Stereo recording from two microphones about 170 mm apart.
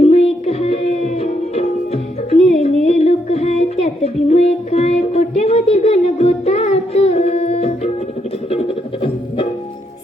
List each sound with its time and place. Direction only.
0.0 s music: 35° left (ahead or behind)